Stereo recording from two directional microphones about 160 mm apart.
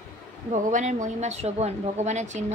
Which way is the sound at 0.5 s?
50° right (ahead or behind).